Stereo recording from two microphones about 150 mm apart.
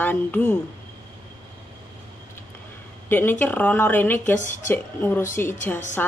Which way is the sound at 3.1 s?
15° left (ahead or behind).